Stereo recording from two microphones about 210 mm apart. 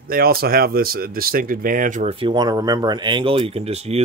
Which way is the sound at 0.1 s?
45° right (ahead or behind).